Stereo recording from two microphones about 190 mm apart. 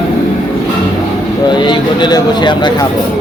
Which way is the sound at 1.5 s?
25° left (ahead or behind).